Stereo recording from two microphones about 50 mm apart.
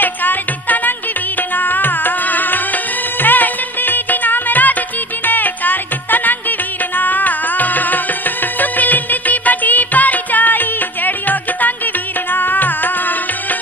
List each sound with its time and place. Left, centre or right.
0.0 s music: left